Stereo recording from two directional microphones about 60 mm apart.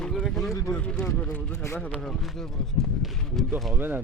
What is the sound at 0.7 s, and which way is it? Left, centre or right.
Speech, centre.